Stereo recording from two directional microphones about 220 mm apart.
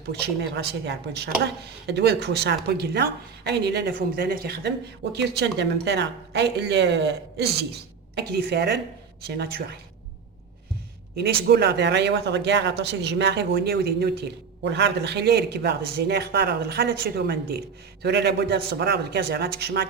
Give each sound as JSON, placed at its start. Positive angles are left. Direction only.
{"t": 0.1, "sound": "speech", "side_deg": -50}
{"t": 11.1, "sound": "speech", "side_deg": -45}